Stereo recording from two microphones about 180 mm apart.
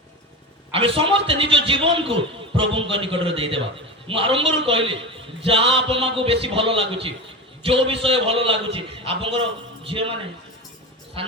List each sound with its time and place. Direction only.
0.7 s a man's voice: 30° right (ahead or behind)
11.2 s a man's voice: 30° right (ahead or behind)